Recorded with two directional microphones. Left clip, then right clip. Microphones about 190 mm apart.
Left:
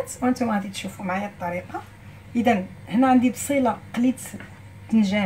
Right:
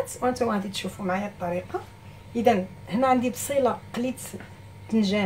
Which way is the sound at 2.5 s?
25° right (ahead or behind).